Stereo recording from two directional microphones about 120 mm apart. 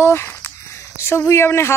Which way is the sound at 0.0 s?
20° left (ahead or behind).